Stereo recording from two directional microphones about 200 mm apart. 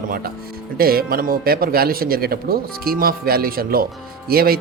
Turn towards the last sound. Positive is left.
turn(degrees=-50)  # may be behind; listen again after turning